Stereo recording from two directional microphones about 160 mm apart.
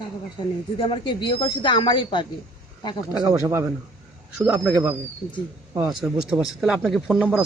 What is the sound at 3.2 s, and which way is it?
Speech, 20° right (ahead or behind).